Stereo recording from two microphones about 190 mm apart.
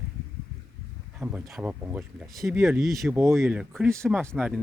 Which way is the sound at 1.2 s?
5° right (ahead or behind).